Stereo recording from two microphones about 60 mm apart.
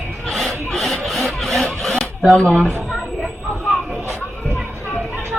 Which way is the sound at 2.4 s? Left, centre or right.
Centre.